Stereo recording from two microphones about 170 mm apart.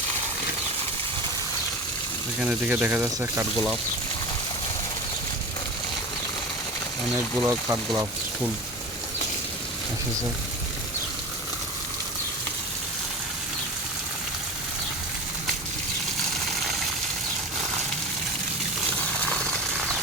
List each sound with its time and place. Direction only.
2.4 s speech: 10° right (ahead or behind)
7.4 s speech: 20° right (ahead or behind)